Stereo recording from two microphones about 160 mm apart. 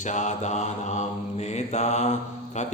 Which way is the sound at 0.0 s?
50° left (ahead or behind).